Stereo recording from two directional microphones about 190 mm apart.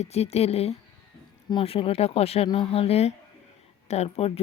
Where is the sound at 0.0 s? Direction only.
35° left (ahead or behind).